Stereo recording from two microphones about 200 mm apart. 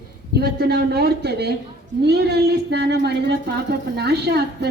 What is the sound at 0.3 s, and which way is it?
A woman's voice, 50° right (ahead or behind).